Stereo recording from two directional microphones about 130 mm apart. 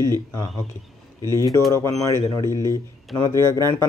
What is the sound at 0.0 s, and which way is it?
Speech, 25° left (ahead or behind).